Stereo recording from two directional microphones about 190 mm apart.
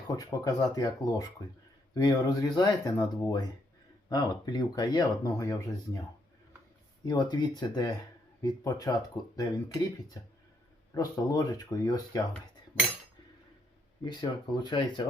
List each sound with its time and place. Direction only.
0.2 s speech: 20° left (ahead or behind)
7.0 s speech: 20° left (ahead or behind)
14.0 s speech: 25° left (ahead or behind)